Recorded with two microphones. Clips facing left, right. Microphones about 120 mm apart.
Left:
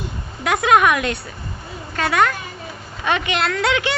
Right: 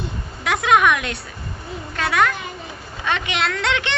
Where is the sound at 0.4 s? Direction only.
Centre (ahead or behind).